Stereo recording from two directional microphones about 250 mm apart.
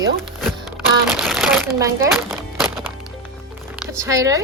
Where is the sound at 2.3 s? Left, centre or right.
Centre.